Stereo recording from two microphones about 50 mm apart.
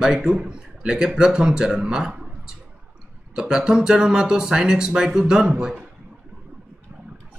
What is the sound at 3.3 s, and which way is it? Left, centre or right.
A man's voice, centre.